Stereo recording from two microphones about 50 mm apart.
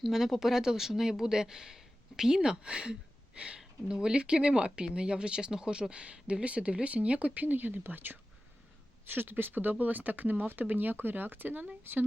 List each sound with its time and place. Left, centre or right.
0.1 s speech: centre; by 12.0 s right